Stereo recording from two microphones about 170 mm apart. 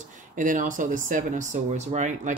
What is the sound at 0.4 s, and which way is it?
Speech, 50° right (ahead or behind).